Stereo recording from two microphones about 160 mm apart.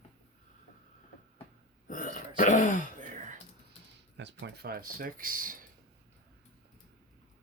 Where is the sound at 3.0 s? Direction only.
50° right (ahead or behind).